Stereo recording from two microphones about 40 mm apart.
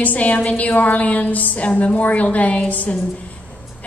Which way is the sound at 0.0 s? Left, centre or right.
Left.